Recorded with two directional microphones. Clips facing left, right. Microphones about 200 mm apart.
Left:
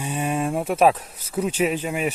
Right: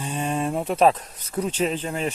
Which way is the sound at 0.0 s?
10° left (ahead or behind).